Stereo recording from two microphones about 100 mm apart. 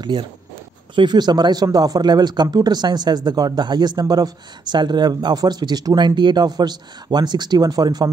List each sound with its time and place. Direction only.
0.0 s speech: 50° right (ahead or behind)